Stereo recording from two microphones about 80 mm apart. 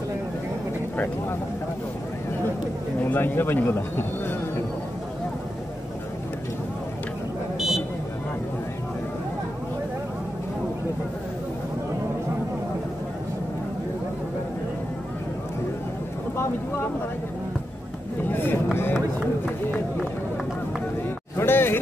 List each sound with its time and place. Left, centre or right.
3.0 s a man's voice: left
7.5 s buzzer: centre
18.3 s vehicle: left
19.1 s run: left
21.4 s a sound: left